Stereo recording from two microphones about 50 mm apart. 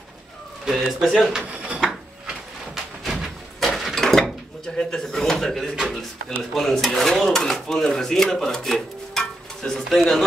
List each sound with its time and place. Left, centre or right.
0.7 s a man's voice: centre
1.5 s wood: centre
1.9 s drawer open or close: centre
3.6 s a sound: centre
4.7 s a man's voice: centre
9.2 s stir: centre